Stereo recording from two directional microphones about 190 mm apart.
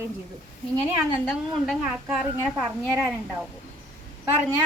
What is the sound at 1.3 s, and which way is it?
A woman's voice, centre (ahead or behind).